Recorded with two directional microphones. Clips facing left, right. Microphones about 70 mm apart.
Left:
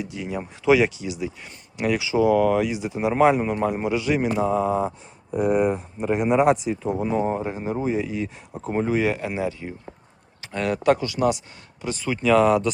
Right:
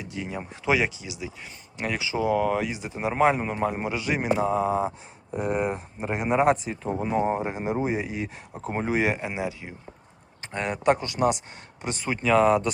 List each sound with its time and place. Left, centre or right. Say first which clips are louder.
0.0 s speech: left 4 dB; centre
2.3 s speech: left 5 dB; centre
7.0 s speech: right 1 dB; centre
11.0 s speech: left 2 dB; right
12.3 s speech: left 2 dB; centre